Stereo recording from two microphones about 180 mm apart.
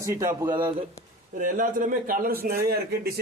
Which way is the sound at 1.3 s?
45° right (ahead or behind).